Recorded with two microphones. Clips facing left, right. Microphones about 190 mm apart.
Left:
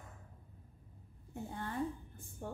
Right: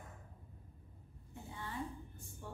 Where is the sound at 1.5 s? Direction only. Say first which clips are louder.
Left 5 dB; 50° left (ahead or behind).